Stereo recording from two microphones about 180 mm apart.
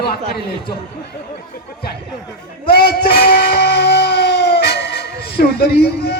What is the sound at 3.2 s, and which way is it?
Music, 60° left (ahead or behind).